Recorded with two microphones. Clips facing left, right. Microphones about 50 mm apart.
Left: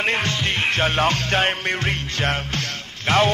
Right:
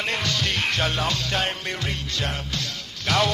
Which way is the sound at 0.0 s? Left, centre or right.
Left.